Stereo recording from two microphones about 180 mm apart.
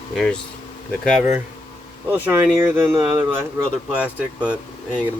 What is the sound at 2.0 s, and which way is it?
Speech, 10° right (ahead or behind).